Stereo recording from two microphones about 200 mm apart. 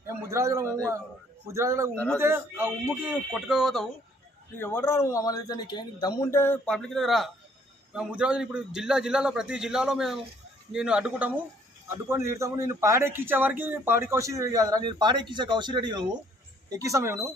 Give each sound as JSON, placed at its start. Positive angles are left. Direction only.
{"t": 0.1, "sound": "a man's voice", "side_deg": -15}
{"t": 4.5, "sound": "a man's voice", "side_deg": 10}